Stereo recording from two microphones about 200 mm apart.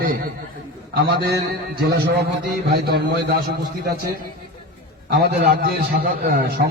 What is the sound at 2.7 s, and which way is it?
A man's voice, 55° right (ahead or behind).